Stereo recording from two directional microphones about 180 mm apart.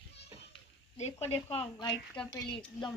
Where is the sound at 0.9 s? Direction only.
35° left (ahead or behind).